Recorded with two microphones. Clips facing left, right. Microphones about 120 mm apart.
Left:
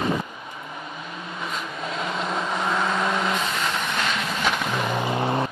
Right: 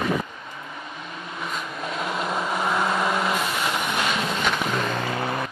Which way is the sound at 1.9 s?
5° right (ahead or behind).